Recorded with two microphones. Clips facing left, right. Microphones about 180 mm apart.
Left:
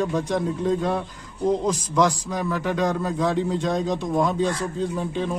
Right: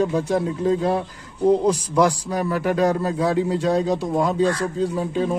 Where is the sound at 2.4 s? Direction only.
45° right (ahead or behind).